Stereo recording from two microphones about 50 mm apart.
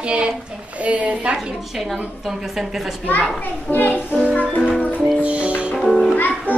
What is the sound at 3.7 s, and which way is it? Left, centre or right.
Speech, left.